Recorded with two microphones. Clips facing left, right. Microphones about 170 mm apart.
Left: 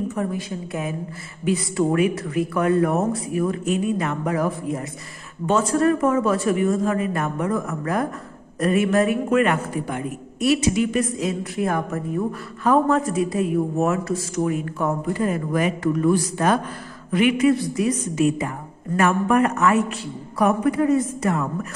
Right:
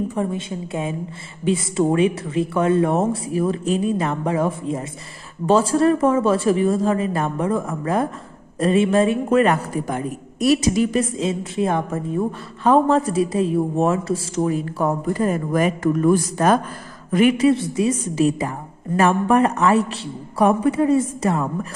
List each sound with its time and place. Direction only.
0.1 s a man's voice: 25° right (ahead or behind)
17.5 s a man's voice: 25° right (ahead or behind)